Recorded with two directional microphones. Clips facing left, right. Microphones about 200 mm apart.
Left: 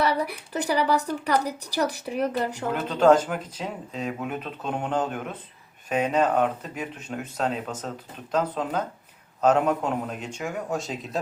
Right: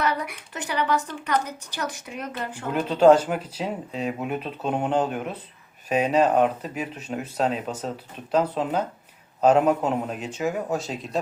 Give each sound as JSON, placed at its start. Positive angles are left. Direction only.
{"t": 0.0, "sound": "a woman's voice", "side_deg": 35}
{"t": 3.0, "sound": "a man's voice", "side_deg": -10}